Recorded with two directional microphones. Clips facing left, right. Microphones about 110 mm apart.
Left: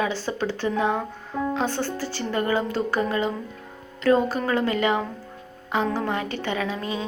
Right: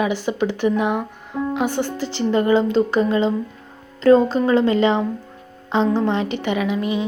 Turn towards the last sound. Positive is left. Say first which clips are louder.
# right 6 dB
turn(degrees=-15)  # may be behind; listen again after turning